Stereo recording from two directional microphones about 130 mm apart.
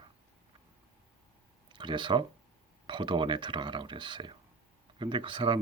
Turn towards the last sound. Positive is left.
turn(degrees=-40)  # may be behind; listen again after turning